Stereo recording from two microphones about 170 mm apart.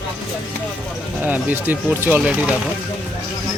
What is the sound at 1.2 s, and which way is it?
A man's voice, 10° right (ahead or behind).